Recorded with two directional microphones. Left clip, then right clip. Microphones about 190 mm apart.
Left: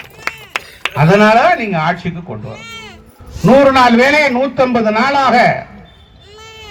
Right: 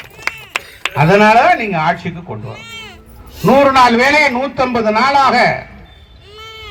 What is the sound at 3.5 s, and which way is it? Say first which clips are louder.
A man's voice: left 1 dB; 55° left (ahead or behind).